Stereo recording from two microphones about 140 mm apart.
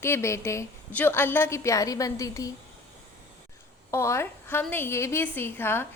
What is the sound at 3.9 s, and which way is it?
A woman's voice, 20° left (ahead or behind).